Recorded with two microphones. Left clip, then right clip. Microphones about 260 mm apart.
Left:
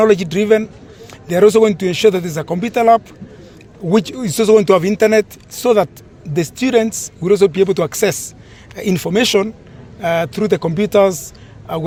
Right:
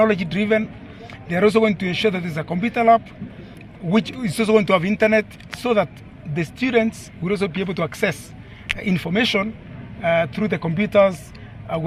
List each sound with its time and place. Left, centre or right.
0.0 s speech: left